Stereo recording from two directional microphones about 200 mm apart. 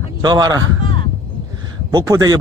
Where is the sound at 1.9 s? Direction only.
15° right (ahead or behind).